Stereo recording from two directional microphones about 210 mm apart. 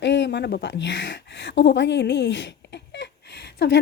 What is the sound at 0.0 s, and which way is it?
Speech, 55° left (ahead or behind).